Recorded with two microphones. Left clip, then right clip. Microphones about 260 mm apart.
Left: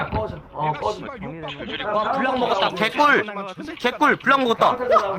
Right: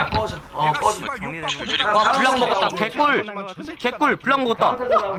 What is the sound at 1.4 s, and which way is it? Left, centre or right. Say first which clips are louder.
Speech: right 7 dB; right.